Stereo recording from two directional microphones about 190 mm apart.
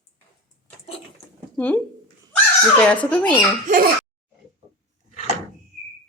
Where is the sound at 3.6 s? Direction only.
45° right (ahead or behind).